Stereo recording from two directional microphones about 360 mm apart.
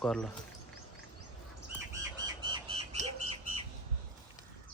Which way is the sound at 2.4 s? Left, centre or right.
Centre.